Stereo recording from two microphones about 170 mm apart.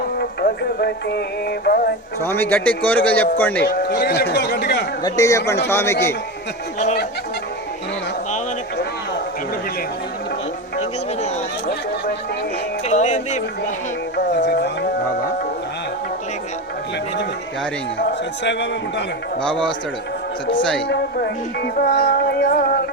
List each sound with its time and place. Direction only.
0.2 s music: 70° left (ahead or behind)
2.2 s a man's voice: 10° left (ahead or behind)
3.7 s a man's voice: 70° left (ahead or behind)
5.0 s a man's voice: 20° left (ahead or behind)
12.9 s music: 45° left (ahead or behind)
14.3 s music: 85° left
18.4 s a man's voice: 90° left
19.4 s a man's voice: 5° left (ahead or behind)
20.8 s speech: 70° left (ahead or behind)